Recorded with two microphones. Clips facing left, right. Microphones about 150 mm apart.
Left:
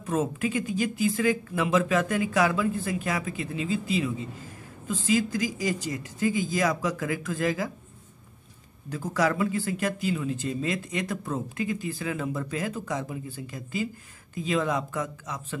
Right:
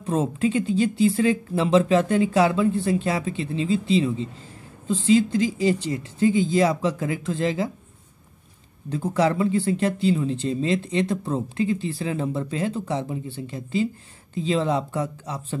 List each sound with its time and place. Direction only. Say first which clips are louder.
0.0 s speech: right 4 dB; 30° right (ahead or behind)
8.8 s speech: right 4 dB; 30° right (ahead or behind)